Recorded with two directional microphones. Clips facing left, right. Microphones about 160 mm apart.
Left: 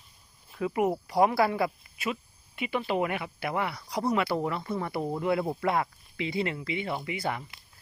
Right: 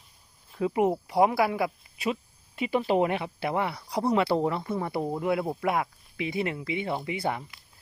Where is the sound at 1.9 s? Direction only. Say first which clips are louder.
Right 3 dB; 35° right (ahead or behind).